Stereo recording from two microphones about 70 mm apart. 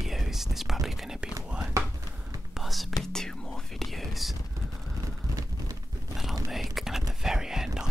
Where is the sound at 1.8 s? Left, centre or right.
Right.